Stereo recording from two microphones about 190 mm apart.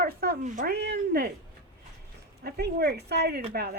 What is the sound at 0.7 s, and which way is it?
Speech, 60° right (ahead or behind).